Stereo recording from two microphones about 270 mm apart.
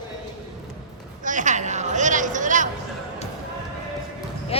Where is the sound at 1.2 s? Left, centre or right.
Right.